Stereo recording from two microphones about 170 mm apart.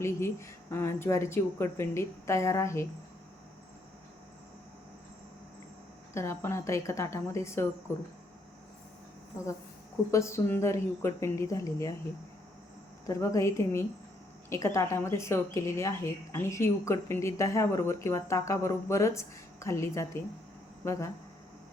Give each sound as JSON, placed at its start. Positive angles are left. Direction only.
{"t": 0.0, "sound": "speech", "side_deg": 15}
{"t": 6.1, "sound": "speech", "side_deg": 15}
{"t": 10.1, "sound": "speech", "side_deg": 15}
{"t": 13.1, "sound": "speech", "side_deg": 15}